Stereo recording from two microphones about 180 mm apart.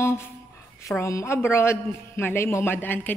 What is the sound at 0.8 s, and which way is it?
A man's voice, 15° left (ahead or behind).